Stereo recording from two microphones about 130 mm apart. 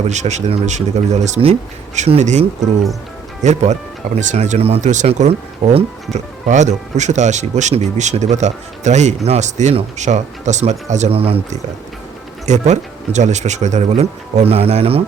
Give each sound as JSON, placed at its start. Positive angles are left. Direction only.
{"t": 0.1, "sound": "speech", "side_deg": -65}
{"t": 12.5, "sound": "speech", "side_deg": -65}